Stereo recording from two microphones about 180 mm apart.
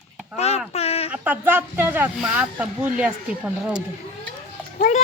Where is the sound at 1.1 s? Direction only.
10° right (ahead or behind).